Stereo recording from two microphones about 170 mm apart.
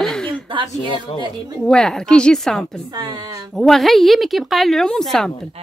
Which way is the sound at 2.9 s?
25° right (ahead or behind).